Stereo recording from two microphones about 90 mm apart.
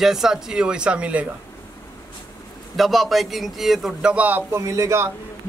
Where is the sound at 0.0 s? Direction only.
5° right (ahead or behind).